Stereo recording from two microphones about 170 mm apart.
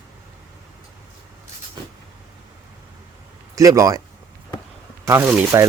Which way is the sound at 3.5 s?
20° right (ahead or behind).